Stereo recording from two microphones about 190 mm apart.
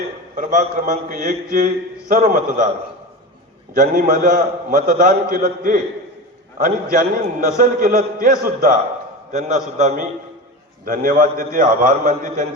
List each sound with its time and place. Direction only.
0.3 s a man's voice: 45° right (ahead or behind)
3.8 s a man's voice: 45° right (ahead or behind)
6.9 s a man's voice: 45° right (ahead or behind)